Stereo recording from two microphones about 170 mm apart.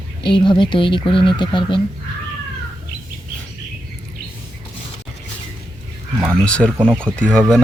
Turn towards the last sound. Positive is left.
turn(degrees=5)  # may be behind; listen again after turning